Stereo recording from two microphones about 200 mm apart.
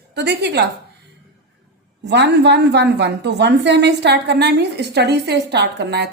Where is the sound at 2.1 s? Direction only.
60° right (ahead or behind).